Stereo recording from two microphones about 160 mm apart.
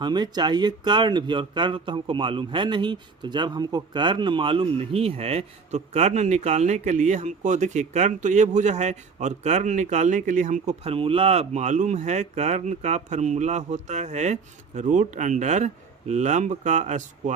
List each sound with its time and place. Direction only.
0.0 s speech: 25° right (ahead or behind); by 17.3 s 50° right (ahead or behind)